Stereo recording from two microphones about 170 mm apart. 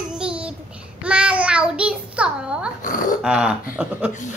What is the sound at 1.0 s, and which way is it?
Child singing, 5° right (ahead or behind).